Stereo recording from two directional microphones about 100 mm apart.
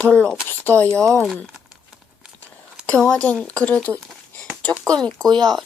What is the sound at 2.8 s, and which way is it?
Speech, 10° left (ahead or behind).